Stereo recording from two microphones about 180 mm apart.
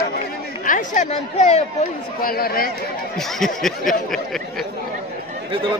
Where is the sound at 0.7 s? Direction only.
45° left (ahead or behind).